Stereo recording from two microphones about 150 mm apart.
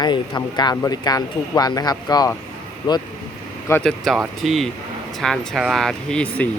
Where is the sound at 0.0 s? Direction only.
30° left (ahead or behind).